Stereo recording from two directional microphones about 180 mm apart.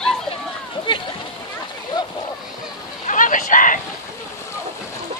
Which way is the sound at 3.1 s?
45° left (ahead or behind).